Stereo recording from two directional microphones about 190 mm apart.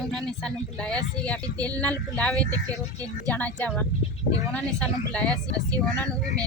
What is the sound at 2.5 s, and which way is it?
Speech, 20° right (ahead or behind).